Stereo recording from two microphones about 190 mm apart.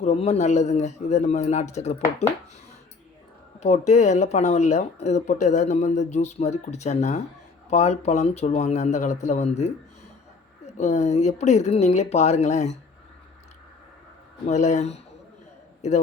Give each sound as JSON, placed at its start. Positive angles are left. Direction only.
{"t": 0.0, "sound": "speech", "side_deg": 35}
{"t": 3.6, "sound": "speech", "side_deg": 35}
{"t": 14.4, "sound": "speech", "side_deg": 35}